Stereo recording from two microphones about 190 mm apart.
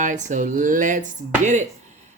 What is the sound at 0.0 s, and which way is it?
Speech, 40° right (ahead or behind).